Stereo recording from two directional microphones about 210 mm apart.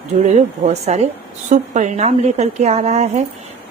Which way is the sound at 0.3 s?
35° right (ahead or behind).